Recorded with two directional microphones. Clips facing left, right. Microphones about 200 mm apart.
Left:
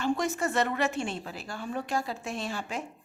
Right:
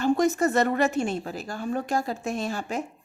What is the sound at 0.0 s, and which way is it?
A woman's voice, 40° right (ahead or behind).